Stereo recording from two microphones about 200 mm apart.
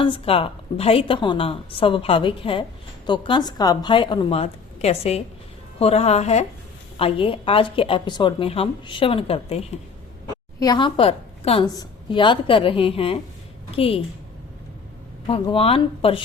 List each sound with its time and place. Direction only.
0.0 s a woman's voice: 25° left (ahead or behind)
15.3 s a woman's voice: 30° left (ahead or behind)